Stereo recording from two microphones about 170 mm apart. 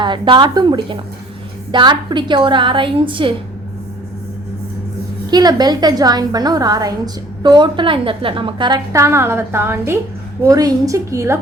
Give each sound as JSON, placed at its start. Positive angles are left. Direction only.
{"t": 0.0, "sound": "a woman's voice", "side_deg": -30}
{"t": 5.3, "sound": "a woman's voice", "side_deg": -25}